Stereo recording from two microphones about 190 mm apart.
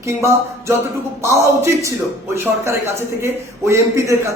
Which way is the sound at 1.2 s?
15° right (ahead or behind).